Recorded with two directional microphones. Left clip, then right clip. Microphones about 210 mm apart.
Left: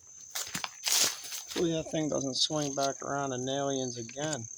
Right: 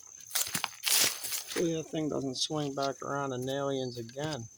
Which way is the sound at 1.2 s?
35° right (ahead or behind).